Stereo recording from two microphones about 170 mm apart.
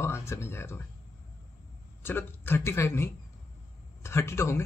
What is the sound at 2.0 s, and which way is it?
Speech, 15° left (ahead or behind).